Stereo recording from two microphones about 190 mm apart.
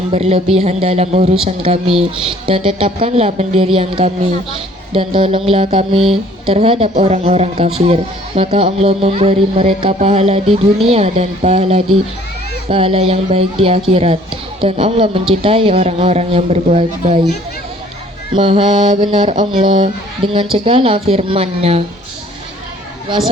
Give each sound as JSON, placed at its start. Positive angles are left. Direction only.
{"t": 0.1, "sound": "a man's voice", "side_deg": -30}
{"t": 18.3, "sound": "a man's voice", "side_deg": -30}